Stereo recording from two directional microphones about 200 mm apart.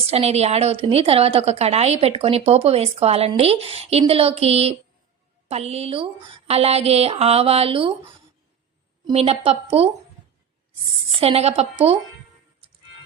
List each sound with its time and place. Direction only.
0.1 s a woman's voice: 30° right (ahead or behind)
9.0 s a woman's voice: 30° right (ahead or behind)
11.2 s a woman's voice: 30° right (ahead or behind)